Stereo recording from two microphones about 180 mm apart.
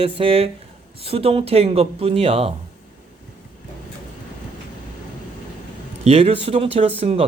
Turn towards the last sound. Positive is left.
turn(degrees=-35)  # may be behind; listen again after turning